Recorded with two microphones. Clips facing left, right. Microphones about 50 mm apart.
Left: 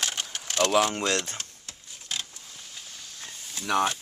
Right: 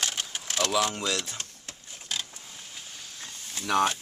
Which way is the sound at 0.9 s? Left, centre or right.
Left.